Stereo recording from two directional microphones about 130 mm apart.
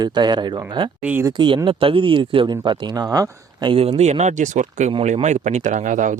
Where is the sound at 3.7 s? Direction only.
50° right (ahead or behind); by 4.9 s 70° right (ahead or behind).